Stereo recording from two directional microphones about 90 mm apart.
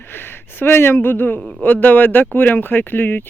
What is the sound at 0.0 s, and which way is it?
Speech, 25° left (ahead or behind).